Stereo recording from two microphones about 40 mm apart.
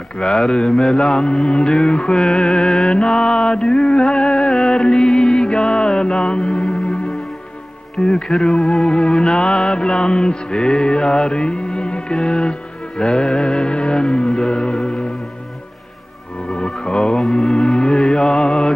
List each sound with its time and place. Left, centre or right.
0.2 s music: centre
0.7 s music: centre
0.9 s music: centre
6.5 s music: centre
7.9 s speech: centre
8.3 s music: centre
14.8 s music: centre
17.2 s mantra: centre
17.7 s music: centre